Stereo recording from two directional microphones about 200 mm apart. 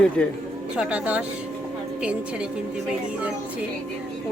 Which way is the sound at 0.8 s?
5° right (ahead or behind).